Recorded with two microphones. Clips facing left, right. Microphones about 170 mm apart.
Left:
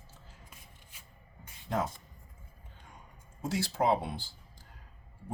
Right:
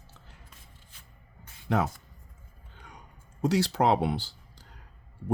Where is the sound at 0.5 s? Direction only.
10° left (ahead or behind).